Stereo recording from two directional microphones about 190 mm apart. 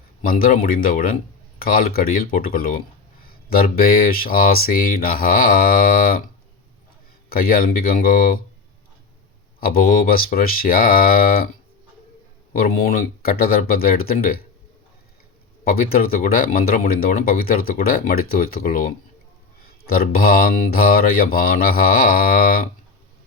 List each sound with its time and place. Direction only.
0.3 s speech: 50° left (ahead or behind)
9.6 s speech: 50° left (ahead or behind)
12.5 s speech: 50° left (ahead or behind)
15.6 s speech: 50° left (ahead or behind)